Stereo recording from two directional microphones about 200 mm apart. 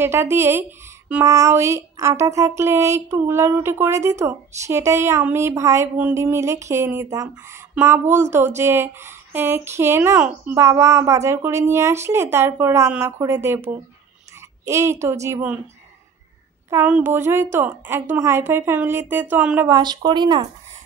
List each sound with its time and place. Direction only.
0.0 s speech: 10° right (ahead or behind)
16.7 s speech: 10° right (ahead or behind)
19.8 s speech: 20° right (ahead or behind)